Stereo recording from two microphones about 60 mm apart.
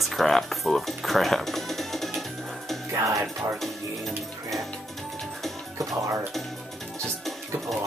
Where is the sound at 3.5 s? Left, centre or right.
Centre.